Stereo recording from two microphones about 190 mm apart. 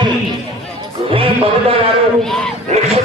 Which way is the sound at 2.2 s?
5° left (ahead or behind).